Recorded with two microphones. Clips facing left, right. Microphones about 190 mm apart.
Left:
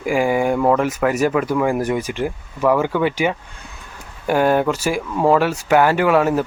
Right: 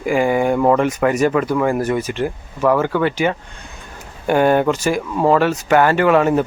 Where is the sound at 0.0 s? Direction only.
5° left (ahead or behind).